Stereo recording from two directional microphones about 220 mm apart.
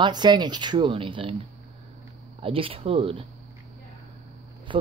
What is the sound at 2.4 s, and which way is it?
Speech, 25° right (ahead or behind).